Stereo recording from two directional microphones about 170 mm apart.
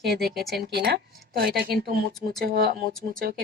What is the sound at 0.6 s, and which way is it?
Speech, 70° right (ahead or behind).